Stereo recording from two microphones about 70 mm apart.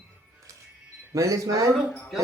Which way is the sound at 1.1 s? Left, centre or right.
Right.